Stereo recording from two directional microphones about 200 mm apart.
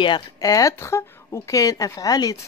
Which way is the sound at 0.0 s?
20° left (ahead or behind).